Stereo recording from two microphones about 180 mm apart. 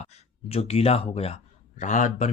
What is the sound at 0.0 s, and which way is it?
Speech, 35° left (ahead or behind).